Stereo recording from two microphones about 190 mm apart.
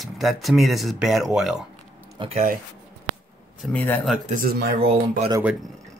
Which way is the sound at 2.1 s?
25° right (ahead or behind).